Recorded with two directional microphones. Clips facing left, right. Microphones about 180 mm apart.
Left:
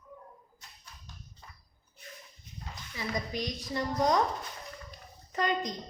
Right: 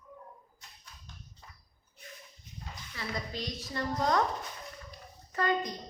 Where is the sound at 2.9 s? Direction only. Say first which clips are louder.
Left 3 dB; 15° left (ahead or behind).